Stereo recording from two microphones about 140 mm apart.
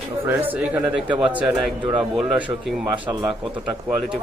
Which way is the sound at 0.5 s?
10° right (ahead or behind).